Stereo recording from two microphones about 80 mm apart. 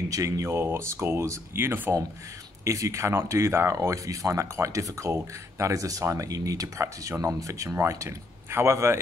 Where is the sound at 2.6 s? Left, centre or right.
Right.